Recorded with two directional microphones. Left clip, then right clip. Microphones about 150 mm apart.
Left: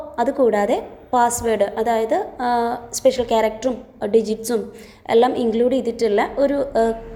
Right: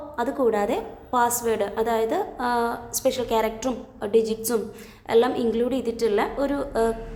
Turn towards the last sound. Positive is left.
turn(degrees=15)  # may be behind; listen again after turning